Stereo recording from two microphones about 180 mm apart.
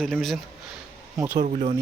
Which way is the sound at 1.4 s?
40° right (ahead or behind).